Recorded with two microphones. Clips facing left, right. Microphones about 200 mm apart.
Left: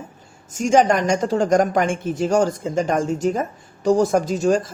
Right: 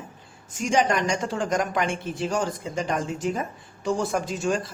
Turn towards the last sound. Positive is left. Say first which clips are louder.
# left 7 dB
turn(degrees=40)  # may be behind; listen again after turning